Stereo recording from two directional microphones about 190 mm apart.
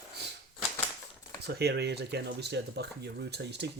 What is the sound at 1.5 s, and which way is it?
Speech, 60° right (ahead or behind).